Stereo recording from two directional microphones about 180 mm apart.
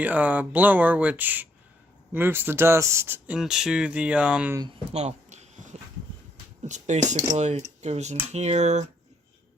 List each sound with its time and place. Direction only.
0.0 s speech: 10° right (ahead or behind)
4.9 s a sound: 40° right (ahead or behind)
6.7 s speech: 40° right (ahead or behind)